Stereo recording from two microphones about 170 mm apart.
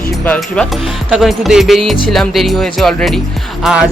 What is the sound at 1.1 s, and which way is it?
Music, centre (ahead or behind).